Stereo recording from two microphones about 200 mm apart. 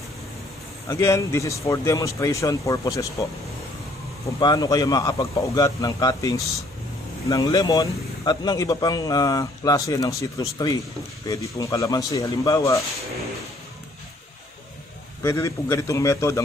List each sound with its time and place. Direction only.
0.8 s speech: 15° left (ahead or behind)
4.4 s speech: 20° left (ahead or behind)
15.2 s speech: 15° left (ahead or behind)